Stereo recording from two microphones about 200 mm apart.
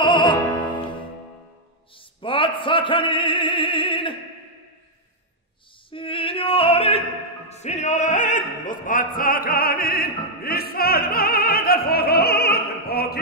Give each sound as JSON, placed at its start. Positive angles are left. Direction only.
{"t": 0.0, "sound": "music", "side_deg": 25}
{"t": 2.0, "sound": "a sound", "side_deg": 25}
{"t": 5.9, "sound": "opera", "side_deg": 25}
{"t": 7.4, "sound": "music", "side_deg": 35}